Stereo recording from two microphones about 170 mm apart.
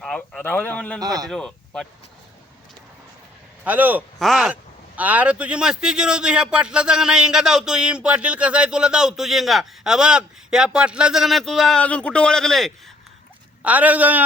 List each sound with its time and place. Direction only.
0.0 s a man's voice: 5° left (ahead or behind)
0.9 s a man's voice: 20° right (ahead or behind)
1.3 s speech: 5° left (ahead or behind)
3.6 s a man's voice: 10° right (ahead or behind)
13.6 s speech: 10° right (ahead or behind)